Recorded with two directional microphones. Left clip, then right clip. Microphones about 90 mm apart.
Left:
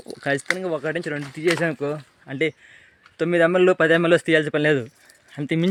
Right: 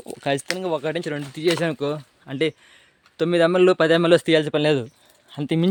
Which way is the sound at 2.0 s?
25° right (ahead or behind).